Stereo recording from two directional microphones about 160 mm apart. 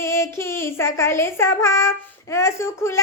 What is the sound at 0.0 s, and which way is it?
Speech, 15° left (ahead or behind).